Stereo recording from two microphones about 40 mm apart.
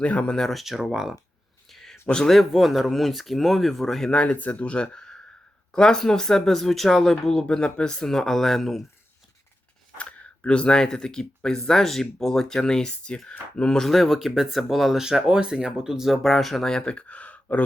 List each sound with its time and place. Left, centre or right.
0.0 s speech: left
0.3 s speech: centre
0.5 s speech: centre
1.6 s a sound: centre
2.4 s speech: centre
4.3 s speech: left
4.7 s speech: left; by 7.4 s centre
7.5 s speech: left
8.0 s speech: centre
10.0 s speech: left
13.7 s speech: centre
15.0 s speech: centre
16.2 s speech: centre
16.8 s a sound: left